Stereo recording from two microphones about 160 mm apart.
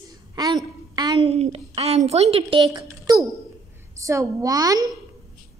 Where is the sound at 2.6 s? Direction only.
25° right (ahead or behind).